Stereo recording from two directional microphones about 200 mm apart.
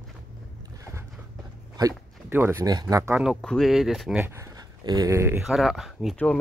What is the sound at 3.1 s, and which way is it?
Speech, centre (ahead or behind).